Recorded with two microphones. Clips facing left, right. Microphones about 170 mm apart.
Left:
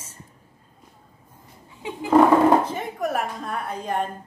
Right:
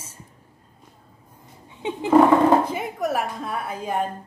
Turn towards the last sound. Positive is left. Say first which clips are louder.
# right 1 dB
turn(degrees=-5)  # may be behind; listen again after turning